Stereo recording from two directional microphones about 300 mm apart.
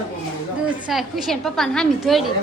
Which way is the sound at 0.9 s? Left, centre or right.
Centre.